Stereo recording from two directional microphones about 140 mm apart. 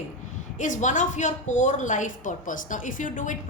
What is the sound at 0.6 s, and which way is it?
A woman's voice, 65° left (ahead or behind).